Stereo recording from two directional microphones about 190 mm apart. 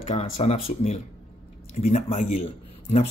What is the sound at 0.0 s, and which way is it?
Speech, 35° left (ahead or behind).